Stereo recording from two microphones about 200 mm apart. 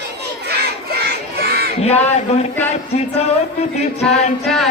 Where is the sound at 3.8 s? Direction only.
30° left (ahead or behind).